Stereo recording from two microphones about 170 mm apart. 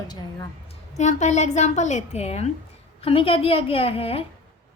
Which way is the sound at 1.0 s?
45° left (ahead or behind).